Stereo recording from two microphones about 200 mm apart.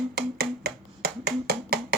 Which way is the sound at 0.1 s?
50° right (ahead or behind).